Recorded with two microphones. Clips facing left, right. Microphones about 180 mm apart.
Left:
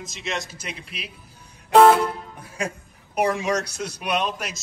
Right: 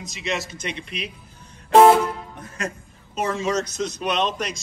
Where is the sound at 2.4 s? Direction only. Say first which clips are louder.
Left 2 dB; 10° left (ahead or behind).